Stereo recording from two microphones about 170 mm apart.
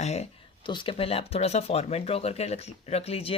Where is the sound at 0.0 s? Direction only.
40° left (ahead or behind).